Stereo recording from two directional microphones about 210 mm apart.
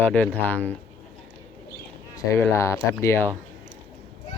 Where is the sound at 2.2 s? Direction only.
10° left (ahead or behind).